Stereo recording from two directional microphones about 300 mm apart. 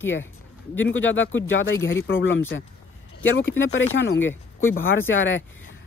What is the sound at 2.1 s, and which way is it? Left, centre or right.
Speech, left.